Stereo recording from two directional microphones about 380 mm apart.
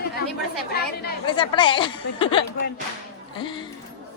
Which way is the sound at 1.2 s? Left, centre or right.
Centre.